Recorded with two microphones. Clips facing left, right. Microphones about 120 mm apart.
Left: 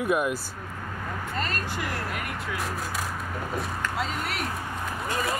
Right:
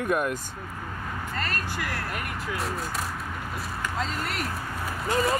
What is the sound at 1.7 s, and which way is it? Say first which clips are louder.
Speech: left 1 dB; 15° left (ahead or behind).